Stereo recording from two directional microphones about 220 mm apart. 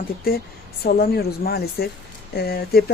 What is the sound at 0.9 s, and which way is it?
Speech, 45° left (ahead or behind).